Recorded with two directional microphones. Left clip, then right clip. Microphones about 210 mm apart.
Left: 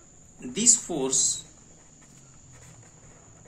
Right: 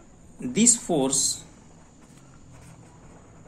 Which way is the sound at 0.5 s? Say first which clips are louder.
Right 2 dB; 40° right (ahead or behind).